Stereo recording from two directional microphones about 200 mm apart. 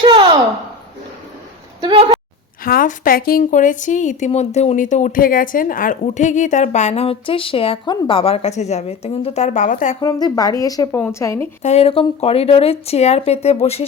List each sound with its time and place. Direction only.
0.0 s a sound: 25° right (ahead or behind)
1.8 s speech: 20° right (ahead or behind)
2.6 s a woman's voice: 45° left (ahead or behind)
10.0 s a woman's voice: 20° left (ahead or behind)
11.6 s a woman's voice: 30° left (ahead or behind)